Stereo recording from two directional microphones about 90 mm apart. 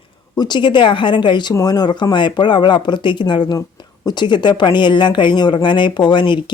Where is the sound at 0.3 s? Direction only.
55° left (ahead or behind).